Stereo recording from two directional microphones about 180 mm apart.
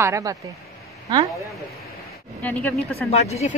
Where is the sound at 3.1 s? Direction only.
40° left (ahead or behind).